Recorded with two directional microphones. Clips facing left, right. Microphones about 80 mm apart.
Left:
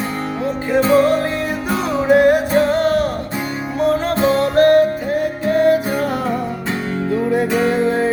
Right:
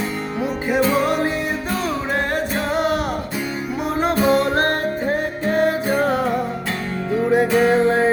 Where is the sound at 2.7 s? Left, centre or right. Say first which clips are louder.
Left 4 dB; centre; by 6.2 s right.